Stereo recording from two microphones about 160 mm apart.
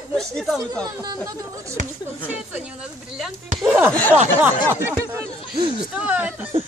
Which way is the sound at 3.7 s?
15° right (ahead or behind).